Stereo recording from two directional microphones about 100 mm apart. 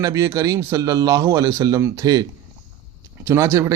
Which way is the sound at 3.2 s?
30° right (ahead or behind).